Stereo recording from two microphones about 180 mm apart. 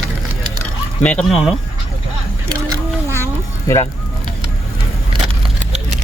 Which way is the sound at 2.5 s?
20° right (ahead or behind).